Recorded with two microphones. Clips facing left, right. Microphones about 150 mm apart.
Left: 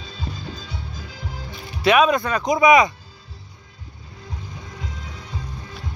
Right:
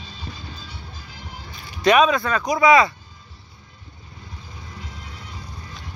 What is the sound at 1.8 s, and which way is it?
Speech, 5° left (ahead or behind).